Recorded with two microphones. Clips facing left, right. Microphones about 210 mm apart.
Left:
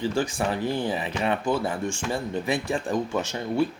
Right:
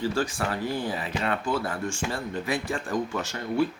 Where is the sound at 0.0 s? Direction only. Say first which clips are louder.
Left 2 dB; 20° left (ahead or behind).